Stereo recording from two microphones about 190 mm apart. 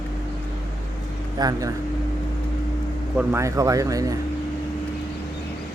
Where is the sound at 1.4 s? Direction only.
20° right (ahead or behind).